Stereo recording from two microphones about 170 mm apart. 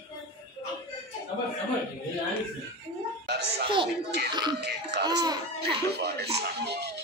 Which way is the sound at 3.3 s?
80° right.